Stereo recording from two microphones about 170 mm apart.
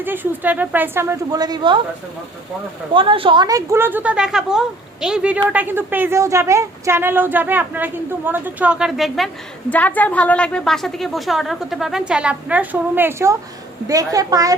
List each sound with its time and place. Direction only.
0.0 s a woman's voice: 10° right (ahead or behind)
2.9 s a woman's voice: 30° right (ahead or behind)